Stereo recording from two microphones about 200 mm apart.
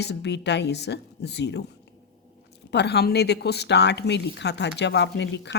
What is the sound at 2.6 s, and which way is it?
A woman's voice, 55° left (ahead or behind).